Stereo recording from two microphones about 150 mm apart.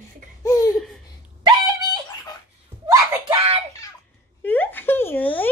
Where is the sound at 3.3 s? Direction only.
40° right (ahead or behind).